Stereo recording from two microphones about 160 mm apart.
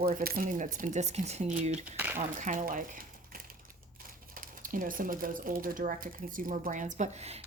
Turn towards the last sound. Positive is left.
turn(degrees=-40)  # may be behind; listen again after turning